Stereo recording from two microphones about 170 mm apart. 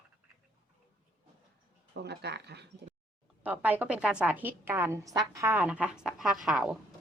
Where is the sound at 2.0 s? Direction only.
75° right (ahead or behind).